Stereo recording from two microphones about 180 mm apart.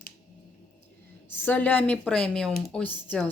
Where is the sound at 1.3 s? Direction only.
10° left (ahead or behind).